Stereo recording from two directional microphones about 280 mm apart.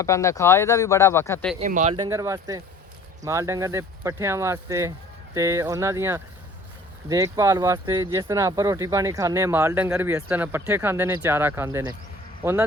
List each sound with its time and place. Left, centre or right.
0.0 s speech: centre
1.5 s speech: right
2.0 s speech: centre